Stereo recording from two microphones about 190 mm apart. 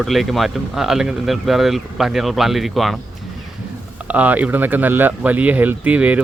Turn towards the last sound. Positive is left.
turn(degrees=-5)  # may be behind; listen again after turning